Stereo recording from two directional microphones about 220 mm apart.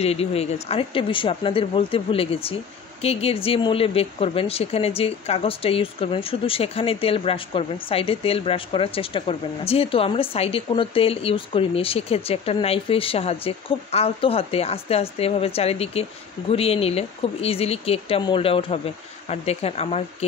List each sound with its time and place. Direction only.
0.0 s speech: 25° left (ahead or behind)